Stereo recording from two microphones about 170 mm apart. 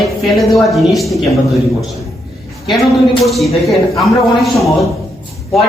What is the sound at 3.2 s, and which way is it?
Speech, centre (ahead or behind).